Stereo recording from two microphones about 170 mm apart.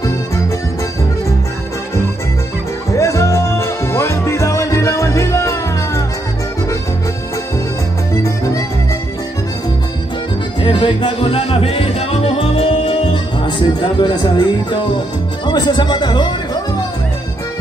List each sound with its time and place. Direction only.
3.0 s music: 15° left (ahead or behind)
8.1 s music: 20° left (ahead or behind)
10.6 s music: 30° left (ahead or behind)
15.4 s speech: 25° left (ahead or behind)